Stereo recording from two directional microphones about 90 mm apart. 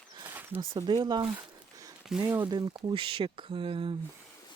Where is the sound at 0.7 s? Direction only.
55° right (ahead or behind).